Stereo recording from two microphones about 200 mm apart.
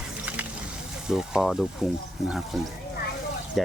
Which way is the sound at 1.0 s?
5° right (ahead or behind).